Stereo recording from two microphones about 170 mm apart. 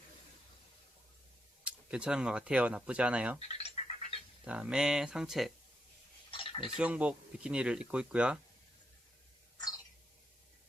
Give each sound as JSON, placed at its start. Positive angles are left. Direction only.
{"t": 1.6, "sound": "speech", "side_deg": -5}
{"t": 3.5, "sound": "bird", "side_deg": 40}
{"t": 4.4, "sound": "speech", "side_deg": -5}
{"t": 6.3, "sound": "a sound", "side_deg": 30}
{"t": 6.7, "sound": "speech", "side_deg": -5}